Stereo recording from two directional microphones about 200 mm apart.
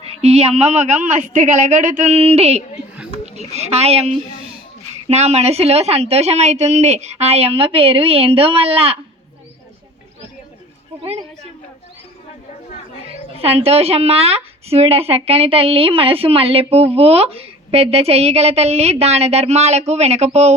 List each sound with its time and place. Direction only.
0.1 s speech: 30° right (ahead or behind)
11.0 s a woman's voice: 30° right (ahead or behind)
13.3 s speech: 30° right (ahead or behind)